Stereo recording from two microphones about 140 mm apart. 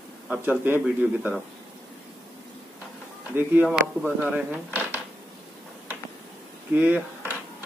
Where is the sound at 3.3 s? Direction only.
15° right (ahead or behind).